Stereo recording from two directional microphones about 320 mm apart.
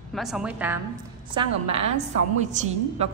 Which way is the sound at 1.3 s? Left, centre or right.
Centre.